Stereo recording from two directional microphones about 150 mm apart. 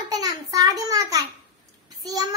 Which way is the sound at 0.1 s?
25° right (ahead or behind).